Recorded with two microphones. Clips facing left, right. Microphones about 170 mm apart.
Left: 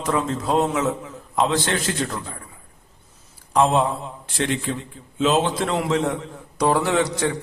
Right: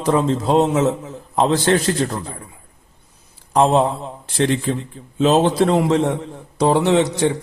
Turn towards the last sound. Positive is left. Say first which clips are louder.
# right 5 dB
turn(degrees=-25)  # may be behind; listen again after turning